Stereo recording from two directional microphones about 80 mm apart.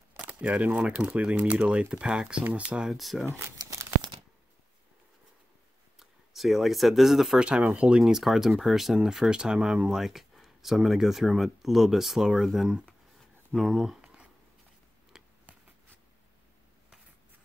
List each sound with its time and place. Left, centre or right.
0.2 s speech: centre
2.9 s speech: centre
3.3 s speech: right
5.9 s speech: centre
7.4 s speech: centre